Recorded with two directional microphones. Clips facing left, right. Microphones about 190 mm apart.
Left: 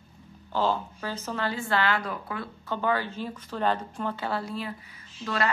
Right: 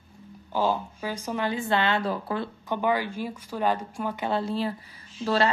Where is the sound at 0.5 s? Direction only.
10° right (ahead or behind); by 2.5 s 30° right (ahead or behind).